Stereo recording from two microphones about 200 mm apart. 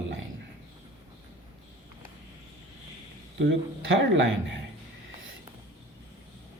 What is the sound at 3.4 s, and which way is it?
Speech, 65° right (ahead or behind).